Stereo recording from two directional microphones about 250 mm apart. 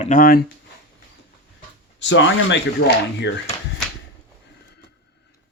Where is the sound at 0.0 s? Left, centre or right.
Left.